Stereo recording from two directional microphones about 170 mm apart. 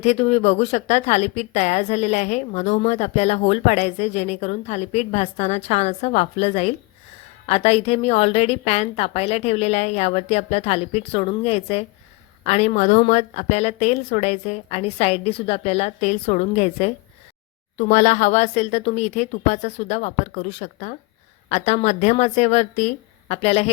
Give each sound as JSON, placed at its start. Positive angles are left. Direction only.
{"t": 0.0, "sound": "a woman's voice", "side_deg": 40}